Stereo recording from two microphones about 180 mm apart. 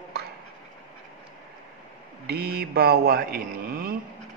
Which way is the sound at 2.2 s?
60° right (ahead or behind).